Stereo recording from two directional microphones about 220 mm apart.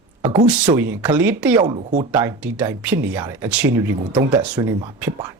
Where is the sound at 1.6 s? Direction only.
20° right (ahead or behind).